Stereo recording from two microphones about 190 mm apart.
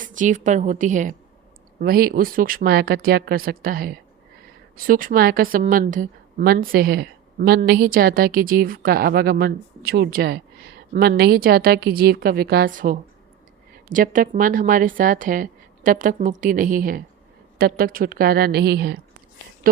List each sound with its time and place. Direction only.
0.0 s a woman's voice: 45° right (ahead or behind)